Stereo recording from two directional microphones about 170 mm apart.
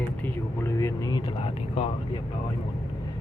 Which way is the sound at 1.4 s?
35° left (ahead or behind).